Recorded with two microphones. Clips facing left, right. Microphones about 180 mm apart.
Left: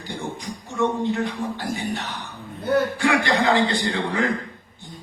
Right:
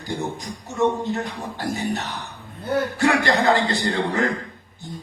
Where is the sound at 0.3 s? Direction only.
40° right (ahead or behind).